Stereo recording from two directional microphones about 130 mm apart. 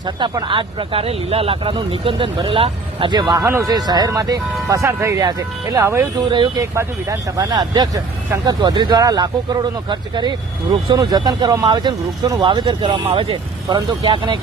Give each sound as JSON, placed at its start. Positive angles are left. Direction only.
{"t": 0.0, "sound": "speech", "side_deg": -35}